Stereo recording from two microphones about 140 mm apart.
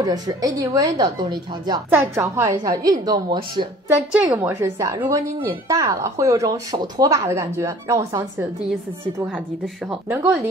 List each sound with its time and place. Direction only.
0.0 s speech: 25° right (ahead or behind)
1.9 s speech: 20° right (ahead or behind)
4.4 s speech: 15° right (ahead or behind)
10.0 s speech: 15° right (ahead or behind)